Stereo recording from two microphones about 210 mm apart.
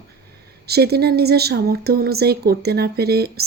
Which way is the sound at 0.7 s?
50° right (ahead or behind).